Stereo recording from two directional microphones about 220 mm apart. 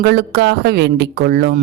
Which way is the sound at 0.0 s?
50° right (ahead or behind).